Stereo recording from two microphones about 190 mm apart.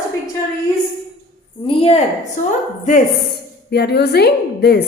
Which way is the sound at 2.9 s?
45° left (ahead or behind).